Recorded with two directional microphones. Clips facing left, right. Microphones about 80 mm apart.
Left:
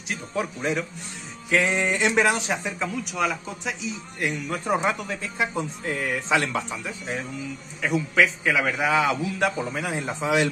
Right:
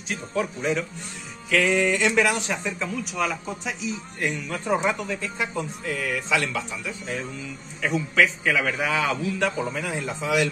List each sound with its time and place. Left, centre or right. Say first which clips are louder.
0.4 s a man's voice: right 1 dB; centre
1.5 s a sound: right 1 dB; left
2.8 s speech: left 1 dB; centre
4.5 s a man's voice: even; centre
5.9 s a sound: left 1 dB; left
8.1 s a man's voice: right 1 dB; centre; by 10.5 s left